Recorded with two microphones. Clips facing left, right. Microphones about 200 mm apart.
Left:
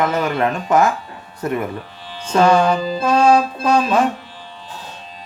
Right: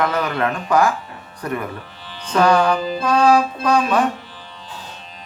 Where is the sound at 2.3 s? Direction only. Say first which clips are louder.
Left 2 dB; 25° left (ahead or behind).